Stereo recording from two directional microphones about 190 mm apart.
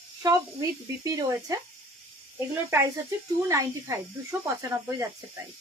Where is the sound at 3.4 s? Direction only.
15° right (ahead or behind).